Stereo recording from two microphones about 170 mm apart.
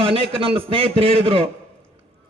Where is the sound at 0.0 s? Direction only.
35° right (ahead or behind).